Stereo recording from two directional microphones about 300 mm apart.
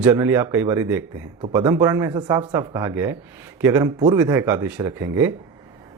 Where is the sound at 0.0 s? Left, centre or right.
Centre.